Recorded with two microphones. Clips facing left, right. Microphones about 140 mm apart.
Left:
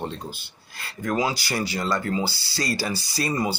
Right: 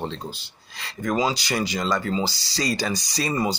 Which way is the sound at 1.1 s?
15° right (ahead or behind).